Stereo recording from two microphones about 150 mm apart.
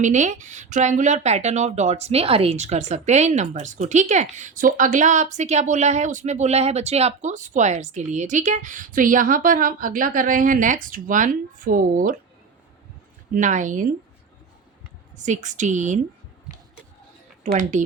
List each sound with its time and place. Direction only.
0.0 s speech: 55° right (ahead or behind)
13.3 s speech: 55° right (ahead or behind)
15.1 s speech: 55° right (ahead or behind)
17.4 s a woman's voice: 55° right (ahead or behind)